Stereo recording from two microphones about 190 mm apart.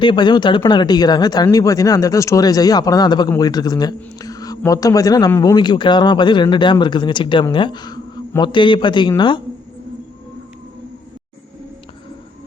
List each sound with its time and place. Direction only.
0.0 s speech: 25° left (ahead or behind)